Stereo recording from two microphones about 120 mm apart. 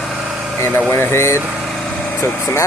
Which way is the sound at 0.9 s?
20° left (ahead or behind).